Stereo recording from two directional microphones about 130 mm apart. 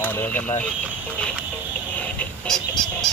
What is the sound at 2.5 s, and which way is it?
Goose, 5° left (ahead or behind).